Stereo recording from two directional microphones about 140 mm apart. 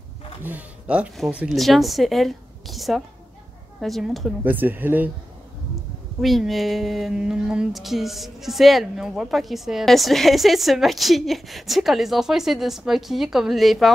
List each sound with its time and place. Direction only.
0.4 s speech: 10° right (ahead or behind)
4.5 s speech: 15° right (ahead or behind)
6.2 s speech: centre (ahead or behind)